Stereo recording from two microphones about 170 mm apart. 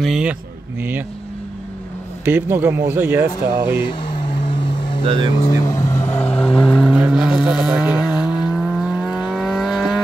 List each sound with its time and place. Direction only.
0.0 s speech: 5° right (ahead or behind)
2.2 s speech: 10° right (ahead or behind)
3.8 s vehicle: 30° left (ahead or behind)
5.0 s speech: 30° right (ahead or behind)
5.4 s speech: 20° left (ahead or behind)
6.2 s vehicle: 5° left (ahead or behind)